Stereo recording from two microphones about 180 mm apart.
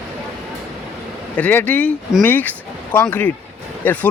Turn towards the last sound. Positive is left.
turn(degrees=10)  # may be behind; listen again after turning